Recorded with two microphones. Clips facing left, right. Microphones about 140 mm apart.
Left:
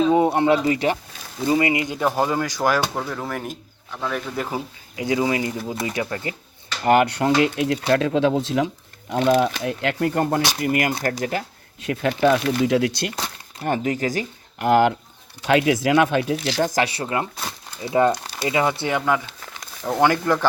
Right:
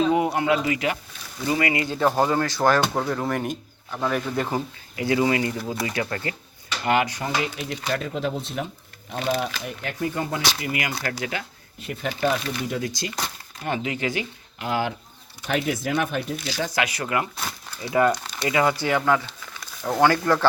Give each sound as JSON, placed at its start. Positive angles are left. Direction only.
{"t": 0.1, "sound": "speech", "side_deg": 25}
{"t": 2.0, "sound": "speech", "side_deg": 5}
{"t": 2.9, "sound": "speech", "side_deg": 0}
{"t": 4.9, "sound": "speech", "side_deg": 15}
{"t": 5.5, "sound": "speech", "side_deg": 0}
{"t": 5.8, "sound": "speech", "side_deg": 20}
{"t": 6.8, "sound": "speech", "side_deg": 50}
{"t": 7.1, "sound": "speech", "side_deg": 70}
{"t": 11.8, "sound": "speech", "side_deg": 80}
{"t": 13.7, "sound": "speech", "side_deg": 45}
{"t": 14.7, "sound": "speech", "side_deg": 60}
{"t": 15.4, "sound": "speech", "side_deg": 90}
{"t": 16.6, "sound": "speech", "side_deg": 35}